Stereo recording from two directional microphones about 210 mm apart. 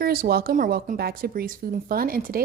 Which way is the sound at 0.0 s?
45° right (ahead or behind).